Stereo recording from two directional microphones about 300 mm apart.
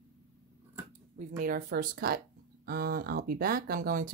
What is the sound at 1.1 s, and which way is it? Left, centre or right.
Speech, right.